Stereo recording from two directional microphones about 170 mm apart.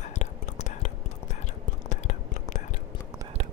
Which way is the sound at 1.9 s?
45° left (ahead or behind).